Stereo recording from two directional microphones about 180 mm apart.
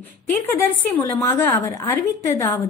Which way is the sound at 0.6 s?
15° left (ahead or behind).